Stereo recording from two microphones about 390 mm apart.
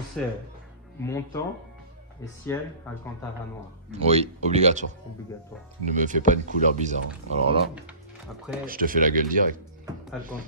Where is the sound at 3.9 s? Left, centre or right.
Centre.